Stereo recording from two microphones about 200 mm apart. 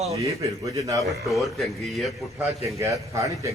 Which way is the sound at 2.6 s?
15° right (ahead or behind).